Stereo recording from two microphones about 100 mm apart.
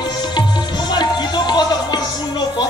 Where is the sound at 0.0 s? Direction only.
45° left (ahead or behind).